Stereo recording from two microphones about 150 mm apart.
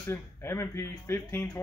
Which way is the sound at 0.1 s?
15° left (ahead or behind).